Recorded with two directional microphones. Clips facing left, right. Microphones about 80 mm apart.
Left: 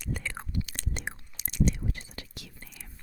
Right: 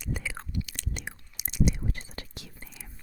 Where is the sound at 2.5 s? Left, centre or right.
Centre.